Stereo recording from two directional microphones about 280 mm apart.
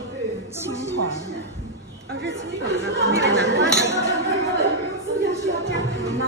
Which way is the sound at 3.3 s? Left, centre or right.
Right.